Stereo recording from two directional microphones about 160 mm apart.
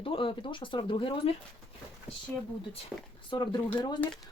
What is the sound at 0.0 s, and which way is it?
Speech, 35° left (ahead or behind).